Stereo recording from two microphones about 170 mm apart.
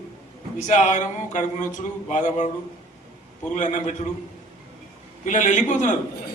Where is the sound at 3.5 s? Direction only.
45° left (ahead or behind).